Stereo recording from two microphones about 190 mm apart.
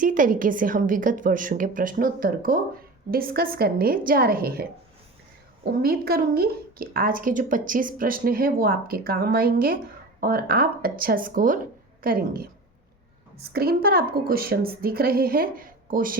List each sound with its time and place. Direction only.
0.0 s a woman's voice: 45° right (ahead or behind)
5.6 s a woman's voice: 55° right (ahead or behind)
13.5 s a woman's voice: 55° right (ahead or behind)